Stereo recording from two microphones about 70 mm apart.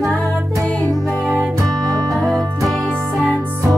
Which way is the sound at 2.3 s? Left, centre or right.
Centre.